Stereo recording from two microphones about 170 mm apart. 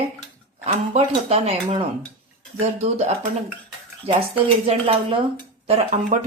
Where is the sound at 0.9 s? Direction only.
35° right (ahead or behind).